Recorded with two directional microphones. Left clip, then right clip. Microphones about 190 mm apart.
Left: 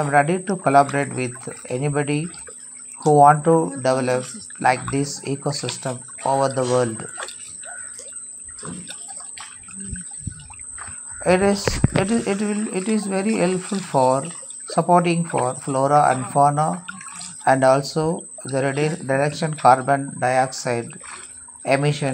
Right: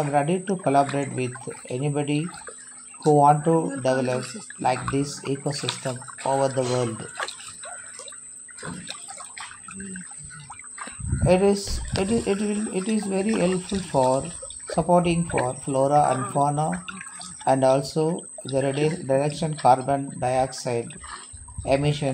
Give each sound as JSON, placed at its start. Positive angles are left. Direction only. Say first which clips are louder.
{"t": 0.1, "sound": "speech", "louder": "left 5 dB", "side_deg": 5}
{"t": 5.9, "sound": "speech", "louder": "left 5 dB", "side_deg": 25}
{"t": 6.4, "sound": "speech", "louder": "left 4 dB", "side_deg": 10}
{"t": 11.2, "sound": "speech", "louder": "left 2 dB", "side_deg": 10}